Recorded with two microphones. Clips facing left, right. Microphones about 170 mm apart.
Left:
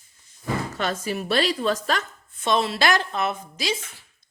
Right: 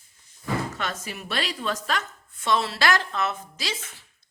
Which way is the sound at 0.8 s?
35° left (ahead or behind).